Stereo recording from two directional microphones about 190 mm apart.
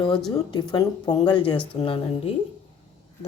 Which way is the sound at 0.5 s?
20° left (ahead or behind).